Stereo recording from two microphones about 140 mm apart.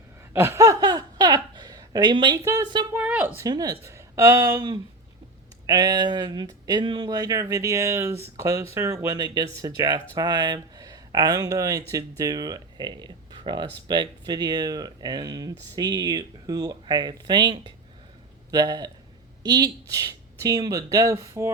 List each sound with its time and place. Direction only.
0.3 s speech: 20° right (ahead or behind)
3.4 s speech: 25° right (ahead or behind)